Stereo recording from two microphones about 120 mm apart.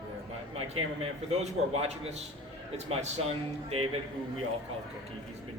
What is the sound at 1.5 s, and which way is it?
Speech, 65° right (ahead or behind).